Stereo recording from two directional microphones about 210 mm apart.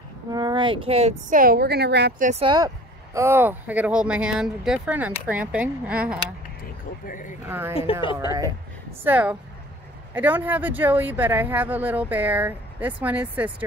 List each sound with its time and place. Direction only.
0.3 s speech: 20° right (ahead or behind); by 2.2 s 50° right (ahead or behind)
2.2 s speech: 30° right (ahead or behind)
2.5 s speech: 15° right (ahead or behind)
7.1 s speech: 40° left (ahead or behind)
7.4 s speech: 10° right (ahead or behind)
7.7 s speech: 25° left (ahead or behind)
8.3 s speech: 15° right (ahead or behind)